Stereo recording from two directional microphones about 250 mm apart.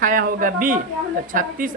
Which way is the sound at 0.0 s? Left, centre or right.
Right.